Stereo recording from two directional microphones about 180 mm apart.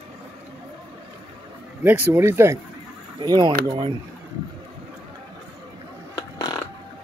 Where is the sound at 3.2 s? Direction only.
25° right (ahead or behind).